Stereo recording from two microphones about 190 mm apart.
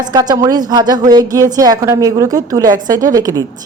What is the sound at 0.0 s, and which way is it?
A woman's voice, 20° right (ahead or behind).